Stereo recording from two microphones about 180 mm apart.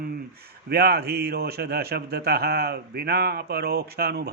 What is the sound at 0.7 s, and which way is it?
A man's voice, 60° right (ahead or behind).